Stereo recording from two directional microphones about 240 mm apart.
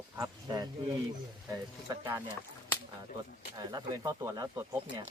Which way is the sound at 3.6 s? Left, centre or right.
Centre.